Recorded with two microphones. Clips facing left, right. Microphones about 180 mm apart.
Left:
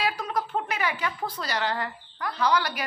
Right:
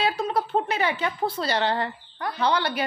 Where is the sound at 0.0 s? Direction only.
25° right (ahead or behind).